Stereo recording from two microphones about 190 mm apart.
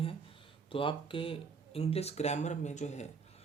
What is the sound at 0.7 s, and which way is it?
Speech, 25° left (ahead or behind).